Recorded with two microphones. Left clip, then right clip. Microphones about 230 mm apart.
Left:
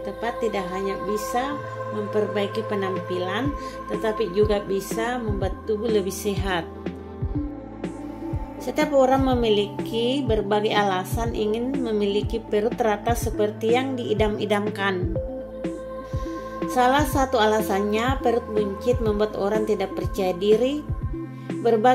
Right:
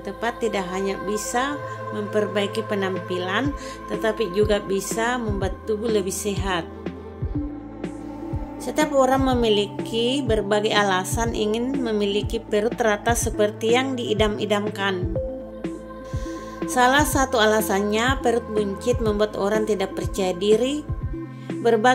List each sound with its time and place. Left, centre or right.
0.2 s a woman's voice: centre
8.6 s a woman's voice: centre
16.6 s a woman's voice: centre
21.8 s speech: centre